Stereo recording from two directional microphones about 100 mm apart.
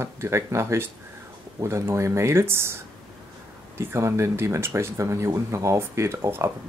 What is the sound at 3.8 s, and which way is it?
Speech, 25° right (ahead or behind).